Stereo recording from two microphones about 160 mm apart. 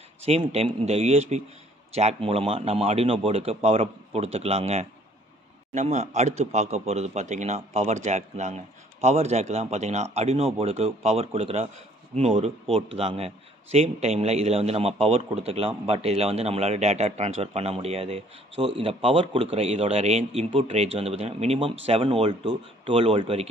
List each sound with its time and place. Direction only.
0.2 s a man's voice: 40° right (ahead or behind)